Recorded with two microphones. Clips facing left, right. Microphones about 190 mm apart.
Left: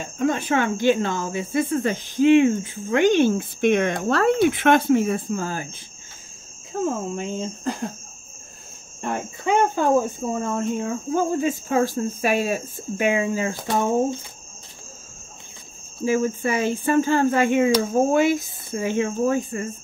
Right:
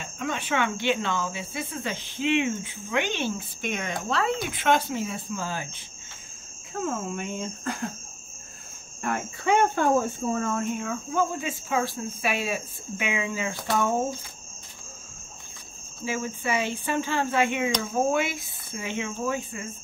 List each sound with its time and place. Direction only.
0.0 s speech: 40° left (ahead or behind)
6.8 s speech: 30° left (ahead or behind)
9.0 s speech: 25° left (ahead or behind)
9.8 s speech: 15° left (ahead or behind)
10.6 s speech: 35° left (ahead or behind)
16.1 s speech: 45° left (ahead or behind)